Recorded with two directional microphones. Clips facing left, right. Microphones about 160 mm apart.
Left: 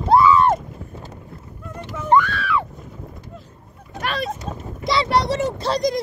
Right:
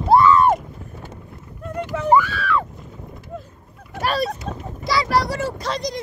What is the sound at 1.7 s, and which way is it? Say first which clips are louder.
Speech: right 7 dB; 70° right (ahead or behind).